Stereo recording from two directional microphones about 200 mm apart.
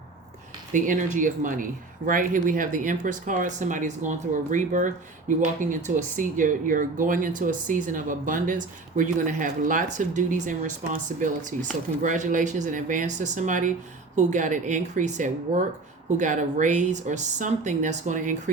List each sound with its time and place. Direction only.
0.7 s speech: 40° right (ahead or behind)
6.0 s speech: 40° right (ahead or behind)